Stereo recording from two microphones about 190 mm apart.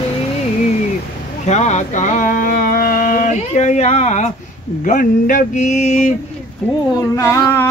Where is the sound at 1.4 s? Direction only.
35° left (ahead or behind).